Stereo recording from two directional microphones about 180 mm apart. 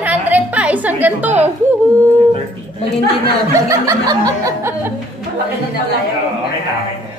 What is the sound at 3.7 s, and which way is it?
Speech, 20° right (ahead or behind).